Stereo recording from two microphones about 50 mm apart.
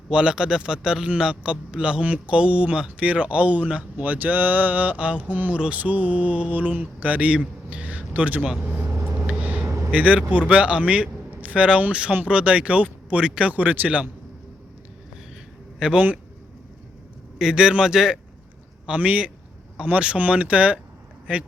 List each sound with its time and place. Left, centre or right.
0.1 s speech: centre
5.5 s speech: right
5.8 s speech: right
7.3 s a sound: right
8.6 s speech: right
8.9 s vehicle: right
9.3 s vehicle: right
9.9 s a man's voice: right
15.8 s speech: right
17.3 s speech: centre
18.9 s speech: right